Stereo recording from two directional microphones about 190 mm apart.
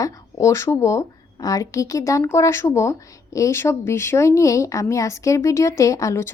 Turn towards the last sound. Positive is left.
turn(degrees=15)  # may be behind; listen again after turning